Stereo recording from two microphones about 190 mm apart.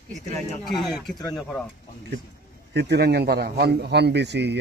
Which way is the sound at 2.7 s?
60° right (ahead or behind).